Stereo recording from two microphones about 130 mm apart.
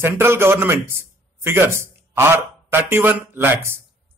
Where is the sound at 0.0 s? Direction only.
20° right (ahead or behind).